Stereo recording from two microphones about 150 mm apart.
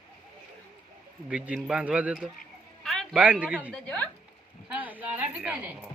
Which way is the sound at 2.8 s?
Centre (ahead or behind).